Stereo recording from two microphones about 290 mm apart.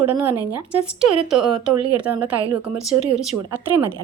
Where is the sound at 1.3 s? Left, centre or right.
Centre.